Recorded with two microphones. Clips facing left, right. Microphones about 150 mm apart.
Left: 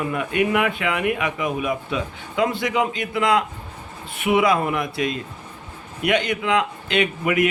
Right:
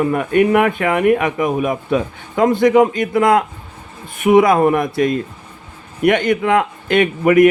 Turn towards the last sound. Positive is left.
turn(degrees=-45)  # may be behind; listen again after turning